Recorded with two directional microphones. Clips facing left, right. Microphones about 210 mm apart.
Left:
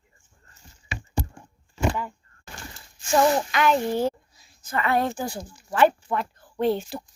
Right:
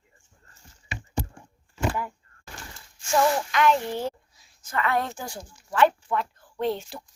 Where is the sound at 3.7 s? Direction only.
35° left (ahead or behind).